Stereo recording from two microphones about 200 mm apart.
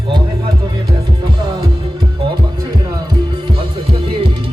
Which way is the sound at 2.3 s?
20° right (ahead or behind).